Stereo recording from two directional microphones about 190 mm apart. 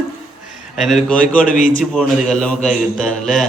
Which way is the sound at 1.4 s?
45° left (ahead or behind).